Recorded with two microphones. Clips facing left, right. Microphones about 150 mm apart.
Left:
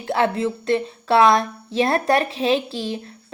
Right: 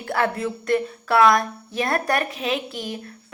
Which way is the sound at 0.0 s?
25° left (ahead or behind).